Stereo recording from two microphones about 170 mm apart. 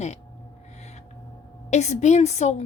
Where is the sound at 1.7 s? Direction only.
40° left (ahead or behind).